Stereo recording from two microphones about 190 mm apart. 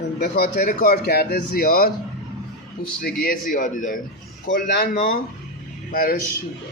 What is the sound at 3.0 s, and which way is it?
A man's voice, 50° left (ahead or behind).